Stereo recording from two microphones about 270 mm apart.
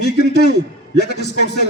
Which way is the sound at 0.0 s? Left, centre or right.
Left.